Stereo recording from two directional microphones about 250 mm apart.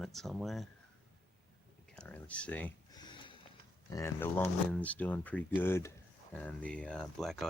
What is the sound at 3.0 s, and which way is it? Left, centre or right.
Sniff, centre.